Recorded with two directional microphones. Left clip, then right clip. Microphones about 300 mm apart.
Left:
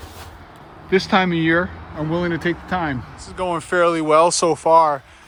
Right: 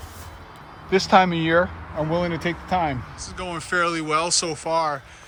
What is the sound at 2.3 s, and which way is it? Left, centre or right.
Speech, centre.